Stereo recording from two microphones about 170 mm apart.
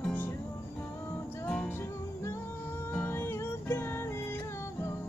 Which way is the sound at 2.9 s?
10° left (ahead or behind).